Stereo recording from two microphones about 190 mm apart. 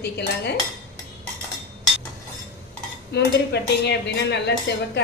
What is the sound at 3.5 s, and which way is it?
Speech, 60° left (ahead or behind).